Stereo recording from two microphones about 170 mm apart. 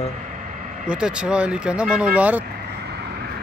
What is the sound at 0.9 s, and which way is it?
Speech, 5° right (ahead or behind).